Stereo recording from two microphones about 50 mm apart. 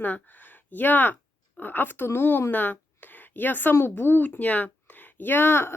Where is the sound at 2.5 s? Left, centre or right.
Left.